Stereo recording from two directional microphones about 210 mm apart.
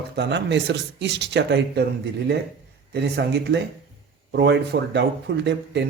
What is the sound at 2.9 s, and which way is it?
Speech, 55° right (ahead or behind).